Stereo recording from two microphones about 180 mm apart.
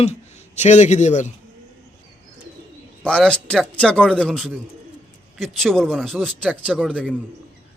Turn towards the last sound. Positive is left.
turn(degrees=5)  # may be behind; listen again after turning